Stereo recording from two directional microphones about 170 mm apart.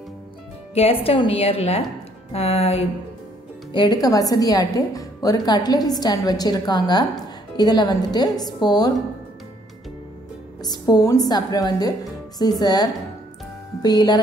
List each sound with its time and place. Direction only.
0.7 s a sound: 35° left (ahead or behind)
3.7 s a woman's voice: 25° left (ahead or behind)
10.6 s a woman's voice: 25° left (ahead or behind)